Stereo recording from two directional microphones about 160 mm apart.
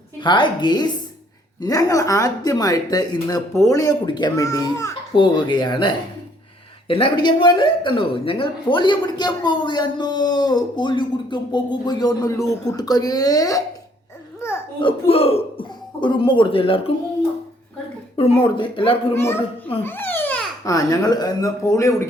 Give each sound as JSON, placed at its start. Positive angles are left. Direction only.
{"t": 0.2, "sound": "speech", "side_deg": 30}
{"t": 14.4, "sound": "a sound", "side_deg": 15}
{"t": 14.8, "sound": "speech", "side_deg": 35}
{"t": 18.2, "sound": "speech", "side_deg": 35}
{"t": 19.1, "sound": "a child's voice", "side_deg": 15}
{"t": 19.8, "sound": "babbling", "side_deg": 15}
{"t": 20.7, "sound": "speech", "side_deg": 25}